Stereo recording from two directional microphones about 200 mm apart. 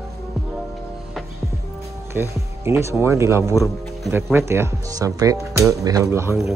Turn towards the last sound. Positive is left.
turn(degrees=-15)  # may be behind; listen again after turning